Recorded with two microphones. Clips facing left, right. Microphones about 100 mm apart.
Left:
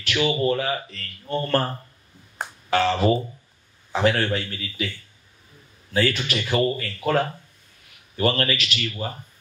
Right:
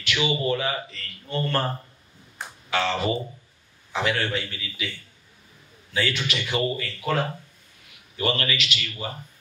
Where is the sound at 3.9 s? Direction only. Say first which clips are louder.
Left 4 dB; 40° left (ahead or behind).